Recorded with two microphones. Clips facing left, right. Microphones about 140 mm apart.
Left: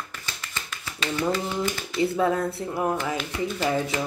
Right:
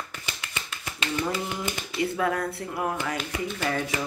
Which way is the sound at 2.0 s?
25° left (ahead or behind).